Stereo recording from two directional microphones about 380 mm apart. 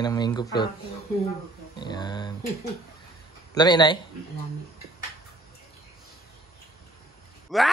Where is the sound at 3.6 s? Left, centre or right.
Centre.